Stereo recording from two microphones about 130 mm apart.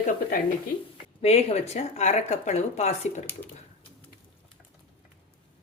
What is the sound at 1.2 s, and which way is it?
Speech, 50° left (ahead or behind).